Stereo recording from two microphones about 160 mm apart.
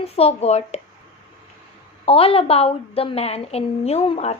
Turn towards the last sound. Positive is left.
turn(degrees=40)  # may be behind; listen again after turning